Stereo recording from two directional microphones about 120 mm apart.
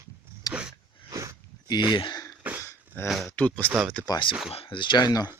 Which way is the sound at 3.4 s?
10° left (ahead or behind).